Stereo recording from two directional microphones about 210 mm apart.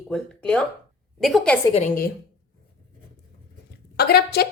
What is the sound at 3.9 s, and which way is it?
Speech, 50° left (ahead or behind).